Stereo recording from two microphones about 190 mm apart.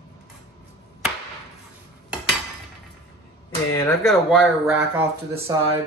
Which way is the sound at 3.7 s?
15° left (ahead or behind).